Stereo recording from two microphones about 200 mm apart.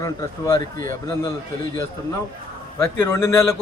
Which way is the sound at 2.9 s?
10° left (ahead or behind).